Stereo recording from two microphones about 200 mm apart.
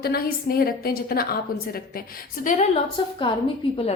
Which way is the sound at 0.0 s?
50° left (ahead or behind).